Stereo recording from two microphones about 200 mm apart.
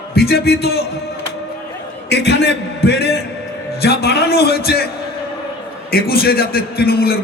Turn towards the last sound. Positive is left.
turn(degrees=50)  # may be behind; listen again after turning